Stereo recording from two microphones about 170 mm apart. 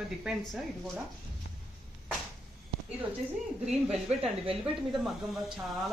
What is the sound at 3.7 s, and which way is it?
Speech, 5° right (ahead or behind).